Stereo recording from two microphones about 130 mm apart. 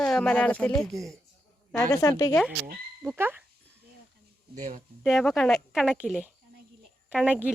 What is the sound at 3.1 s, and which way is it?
Speech, 15° right (ahead or behind).